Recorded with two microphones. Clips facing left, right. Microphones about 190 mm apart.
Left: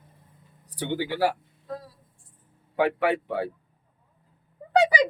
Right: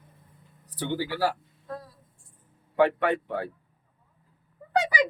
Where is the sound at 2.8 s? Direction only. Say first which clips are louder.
Right 1 dB; 5° left (ahead or behind).